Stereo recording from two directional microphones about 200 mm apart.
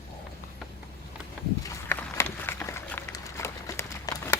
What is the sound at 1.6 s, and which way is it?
Run, 15° left (ahead or behind).